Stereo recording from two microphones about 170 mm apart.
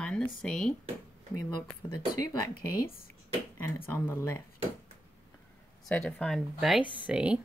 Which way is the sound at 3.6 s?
10° left (ahead or behind).